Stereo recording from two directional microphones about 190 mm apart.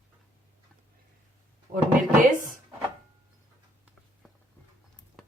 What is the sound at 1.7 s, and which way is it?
Speech, 45° right (ahead or behind).